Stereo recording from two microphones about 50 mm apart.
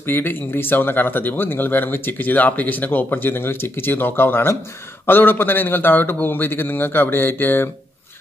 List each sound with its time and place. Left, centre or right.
0.0 s speech: left